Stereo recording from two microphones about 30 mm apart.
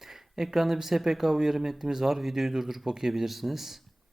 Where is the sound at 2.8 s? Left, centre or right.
Right.